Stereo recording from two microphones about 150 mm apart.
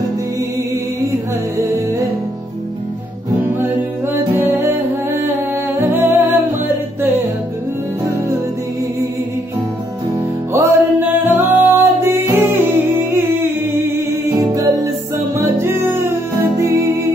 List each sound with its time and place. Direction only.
3.7 s music: 15° right (ahead or behind)
5.8 s humming: 15° right (ahead or behind)
10.5 s music: 15° right (ahead or behind)